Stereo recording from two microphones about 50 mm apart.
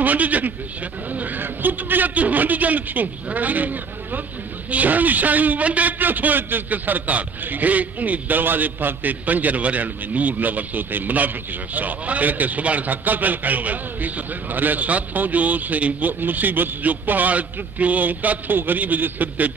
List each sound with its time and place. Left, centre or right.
0.0 s a man's voice: right